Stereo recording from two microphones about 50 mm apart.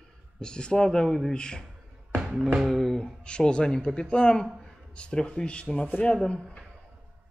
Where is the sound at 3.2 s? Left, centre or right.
Centre.